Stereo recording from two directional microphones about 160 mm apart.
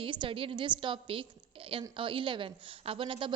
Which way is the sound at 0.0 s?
30° right (ahead or behind).